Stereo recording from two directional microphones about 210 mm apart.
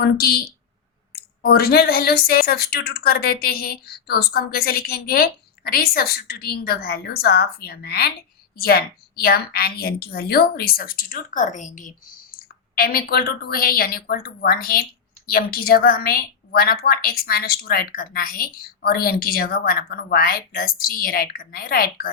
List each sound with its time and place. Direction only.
0.0 s a woman's voice: 50° left (ahead or behind)